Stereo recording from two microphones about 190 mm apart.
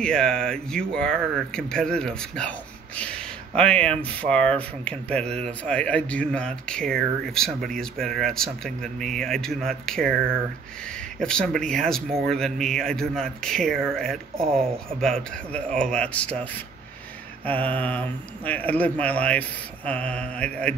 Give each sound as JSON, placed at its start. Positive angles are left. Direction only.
{"t": 0.0, "sound": "speech", "side_deg": 5}
{"t": 14.3, "sound": "speech", "side_deg": -30}
{"t": 15.0, "sound": "speech", "side_deg": 5}
{"t": 17.5, "sound": "speech", "side_deg": 10}